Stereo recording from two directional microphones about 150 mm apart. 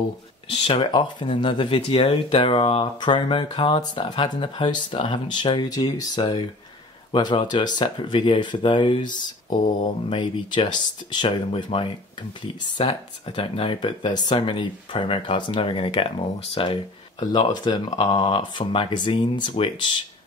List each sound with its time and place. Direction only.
0.5 s speech: 40° left (ahead or behind)